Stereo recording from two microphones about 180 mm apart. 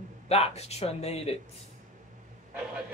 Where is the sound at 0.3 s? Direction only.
35° left (ahead or behind).